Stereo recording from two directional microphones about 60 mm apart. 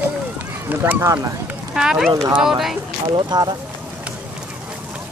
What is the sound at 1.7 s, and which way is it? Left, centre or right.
Speech, centre.